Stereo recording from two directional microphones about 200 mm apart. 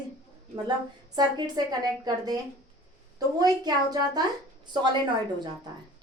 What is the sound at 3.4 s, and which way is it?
Speech, 20° right (ahead or behind).